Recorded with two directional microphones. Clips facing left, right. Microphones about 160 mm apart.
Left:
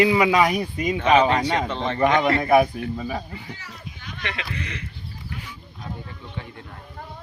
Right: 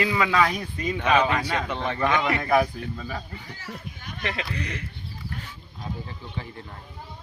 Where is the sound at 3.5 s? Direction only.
50° right (ahead or behind).